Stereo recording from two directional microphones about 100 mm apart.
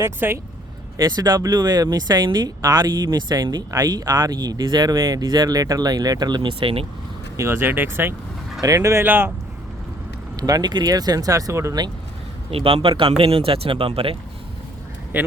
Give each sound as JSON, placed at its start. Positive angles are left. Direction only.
{"t": 0.0, "sound": "speech", "side_deg": -25}
{"t": 0.9, "sound": "speech", "side_deg": -40}
{"t": 6.5, "sound": "speech", "side_deg": -65}
{"t": 7.3, "sound": "speech", "side_deg": -25}
{"t": 8.6, "sound": "speech", "side_deg": -35}
{"t": 10.3, "sound": "speech", "side_deg": -40}
{"t": 12.5, "sound": "speech", "side_deg": -70}
{"t": 15.1, "sound": "speech", "side_deg": -20}